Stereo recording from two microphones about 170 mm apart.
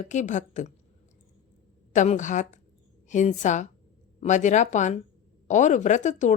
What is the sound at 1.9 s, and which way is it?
A woman's voice, 45° left (ahead or behind).